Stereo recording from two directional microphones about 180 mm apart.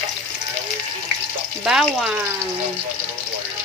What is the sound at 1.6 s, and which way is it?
Speech, centre (ahead or behind).